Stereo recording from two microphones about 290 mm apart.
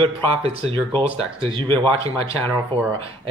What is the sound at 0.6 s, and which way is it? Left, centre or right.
Speech, centre.